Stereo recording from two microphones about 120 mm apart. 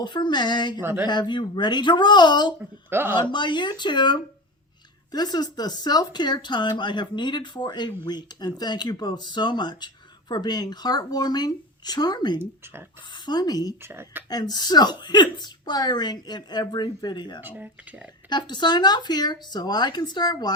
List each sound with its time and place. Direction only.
0.0 s speech: 40° left (ahead or behind)
0.8 s speech: 20° right (ahead or behind)
1.0 s speech: 40° left (ahead or behind)
2.9 s speech: 20° right (ahead or behind)
3.2 s speech: 40° left (ahead or behind)
13.8 s speech: 20° right (ahead or behind)
14.3 s speech: 35° left (ahead or behind)
17.4 s speech: 15° right (ahead or behind)
18.3 s speech: 35° left (ahead or behind)